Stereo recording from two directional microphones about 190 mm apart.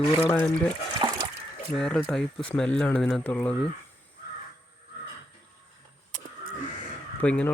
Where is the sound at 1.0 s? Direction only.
20° right (ahead or behind).